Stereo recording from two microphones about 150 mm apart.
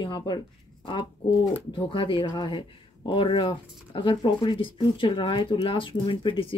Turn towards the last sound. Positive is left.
turn(degrees=35)  # may be behind; listen again after turning